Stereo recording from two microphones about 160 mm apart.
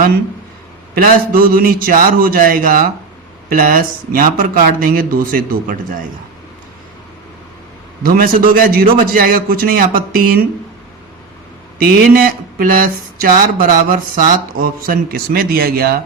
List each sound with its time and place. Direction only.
0.9 s speech: 65° right (ahead or behind)
8.0 s speech: 60° right (ahead or behind)
11.8 s speech: 60° right (ahead or behind)